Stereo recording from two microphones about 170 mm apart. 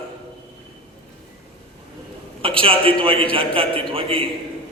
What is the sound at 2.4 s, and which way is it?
A man's voice, 30° right (ahead or behind).